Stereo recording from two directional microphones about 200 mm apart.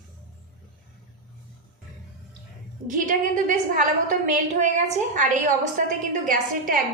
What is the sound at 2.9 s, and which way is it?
A woman's voice, 40° right (ahead or behind).